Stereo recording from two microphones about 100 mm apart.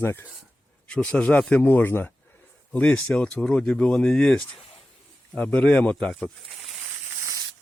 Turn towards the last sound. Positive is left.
turn(degrees=0)  # may be behind; listen again after turning